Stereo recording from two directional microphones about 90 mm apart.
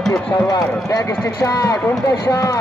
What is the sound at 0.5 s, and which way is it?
Speech, 40° left (ahead or behind).